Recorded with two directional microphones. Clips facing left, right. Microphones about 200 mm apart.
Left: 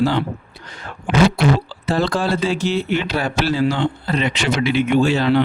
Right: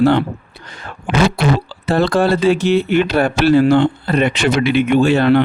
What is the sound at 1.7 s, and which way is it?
Speech, 60° right (ahead or behind).